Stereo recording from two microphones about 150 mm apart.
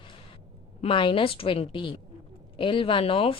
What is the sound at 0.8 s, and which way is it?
A woman's voice, 35° left (ahead or behind).